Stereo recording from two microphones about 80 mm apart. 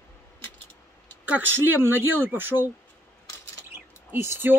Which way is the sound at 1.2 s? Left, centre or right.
Right.